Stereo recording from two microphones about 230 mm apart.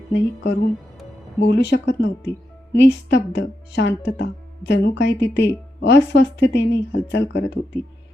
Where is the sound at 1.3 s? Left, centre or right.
Left.